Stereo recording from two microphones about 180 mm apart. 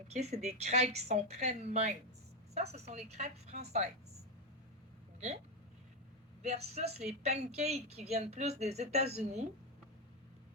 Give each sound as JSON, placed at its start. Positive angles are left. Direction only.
{"t": 0.1, "sound": "speech", "side_deg": -40}
{"t": 6.4, "sound": "speech", "side_deg": -35}